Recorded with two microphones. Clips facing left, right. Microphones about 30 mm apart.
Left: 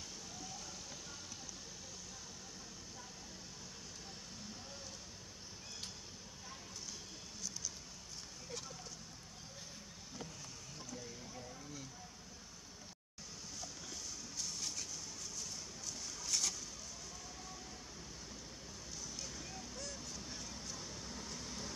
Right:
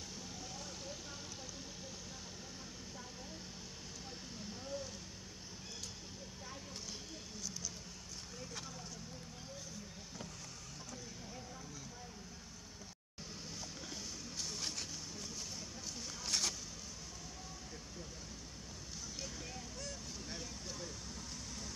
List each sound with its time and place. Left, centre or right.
14.6 s vehicle: right
16.3 s bird: right
19.2 s vehicle: centre
20.2 s a sound: centre
20.7 s vehicle: centre
21.2 s vehicle: centre